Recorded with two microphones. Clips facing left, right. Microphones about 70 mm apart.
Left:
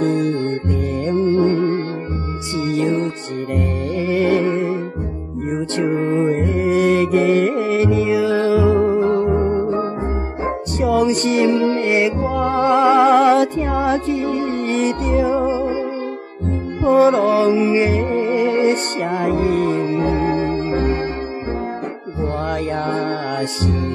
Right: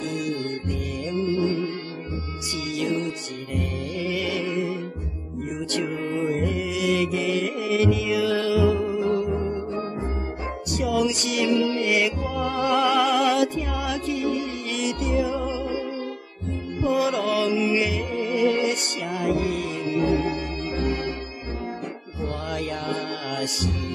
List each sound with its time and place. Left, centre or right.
0.0 s music: left
2.5 s music: left
16.8 s music: left
22.2 s music: left